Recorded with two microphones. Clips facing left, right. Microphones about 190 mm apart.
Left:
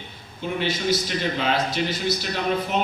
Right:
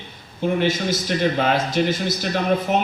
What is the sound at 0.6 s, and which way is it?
A man's voice, 50° right (ahead or behind).